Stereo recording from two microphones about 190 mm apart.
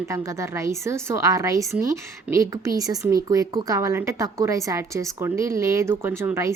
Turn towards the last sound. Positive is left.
turn(degrees=-15)  # may be behind; listen again after turning